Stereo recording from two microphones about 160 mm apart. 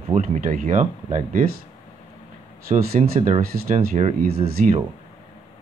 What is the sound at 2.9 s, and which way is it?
Speech, 50° right (ahead or behind).